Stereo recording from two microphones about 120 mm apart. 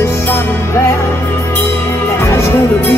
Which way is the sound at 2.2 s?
20° left (ahead or behind).